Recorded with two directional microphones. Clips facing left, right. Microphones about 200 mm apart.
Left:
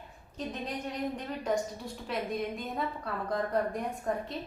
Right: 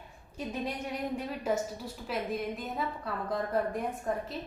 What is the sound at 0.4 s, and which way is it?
A woman's voice, 10° right (ahead or behind).